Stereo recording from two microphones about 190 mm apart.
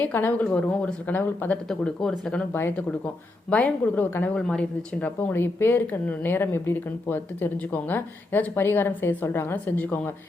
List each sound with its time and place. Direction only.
0.0 s speech: 10° left (ahead or behind)